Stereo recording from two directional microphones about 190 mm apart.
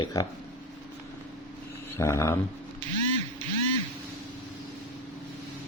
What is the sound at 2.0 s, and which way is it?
Speech, 15° left (ahead or behind).